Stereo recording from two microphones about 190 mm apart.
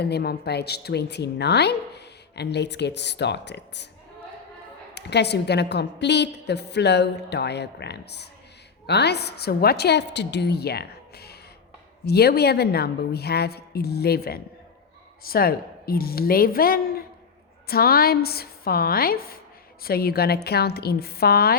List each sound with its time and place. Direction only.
0.0 s a woman's voice: 55° left (ahead or behind)
4.9 s a woman's voice: 60° left (ahead or behind)